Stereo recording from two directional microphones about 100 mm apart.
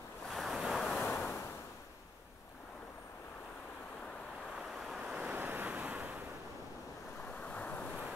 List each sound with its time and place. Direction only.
0.3 s waves: centre (ahead or behind)
0.9 s waves: 15° left (ahead or behind)
4.6 s waves: 5° right (ahead or behind)
7.4 s waves: 15° left (ahead or behind)